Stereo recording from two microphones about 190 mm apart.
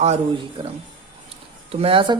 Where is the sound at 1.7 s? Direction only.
30° right (ahead or behind).